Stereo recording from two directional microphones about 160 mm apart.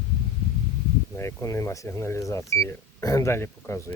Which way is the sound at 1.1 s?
15° left (ahead or behind).